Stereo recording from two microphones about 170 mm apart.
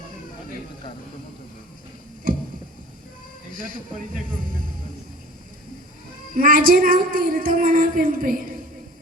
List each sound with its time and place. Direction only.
3.5 s speech: 55° right (ahead or behind)
6.3 s a woman's voice: 55° right (ahead or behind)